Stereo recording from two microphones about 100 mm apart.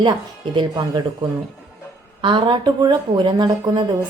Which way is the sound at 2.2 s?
55° right (ahead or behind).